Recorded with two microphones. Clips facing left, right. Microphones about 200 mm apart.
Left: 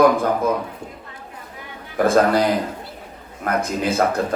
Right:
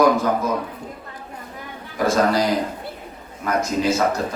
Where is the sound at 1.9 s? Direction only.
55° left (ahead or behind).